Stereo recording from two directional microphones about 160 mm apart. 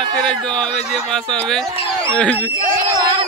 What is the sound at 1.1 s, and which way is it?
Speech, 5° left (ahead or behind).